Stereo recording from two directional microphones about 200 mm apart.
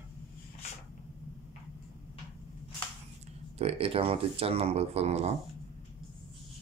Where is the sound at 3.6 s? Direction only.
30° right (ahead or behind).